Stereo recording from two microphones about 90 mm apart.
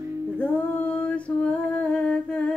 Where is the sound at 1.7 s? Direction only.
15° left (ahead or behind).